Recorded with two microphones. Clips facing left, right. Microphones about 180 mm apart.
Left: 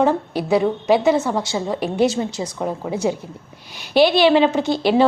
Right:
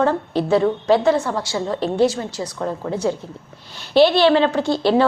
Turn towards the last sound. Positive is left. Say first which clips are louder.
# left 1 dB
turn(degrees=20)  # may be behind; listen again after turning